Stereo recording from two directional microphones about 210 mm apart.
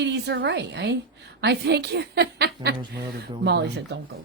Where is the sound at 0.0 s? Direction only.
55° right (ahead or behind).